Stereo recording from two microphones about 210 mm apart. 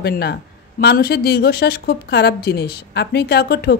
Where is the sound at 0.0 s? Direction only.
50° left (ahead or behind).